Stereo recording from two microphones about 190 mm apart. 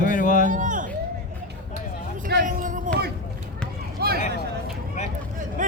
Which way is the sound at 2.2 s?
45° right (ahead or behind).